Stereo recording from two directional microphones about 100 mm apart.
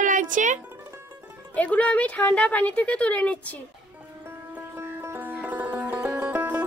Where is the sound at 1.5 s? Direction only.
15° left (ahead or behind).